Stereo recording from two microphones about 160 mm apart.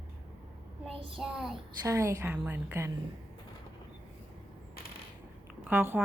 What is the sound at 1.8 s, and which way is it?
A woman's voice, 15° right (ahead or behind).